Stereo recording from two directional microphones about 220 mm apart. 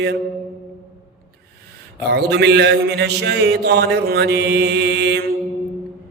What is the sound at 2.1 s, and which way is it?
Mantra, 50° right (ahead or behind).